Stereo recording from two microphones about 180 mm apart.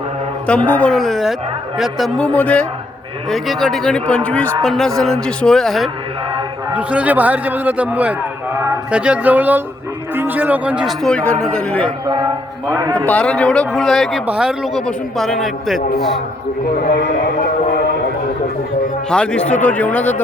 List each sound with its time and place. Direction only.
0.4 s a man's voice: 5° left (ahead or behind)
12.0 s a man's voice: 20° right (ahead or behind)
13.1 s speech: 5° left (ahead or behind)
16.7 s a man's voice: 60° left (ahead or behind)
19.1 s a man's voice: 5° left (ahead or behind)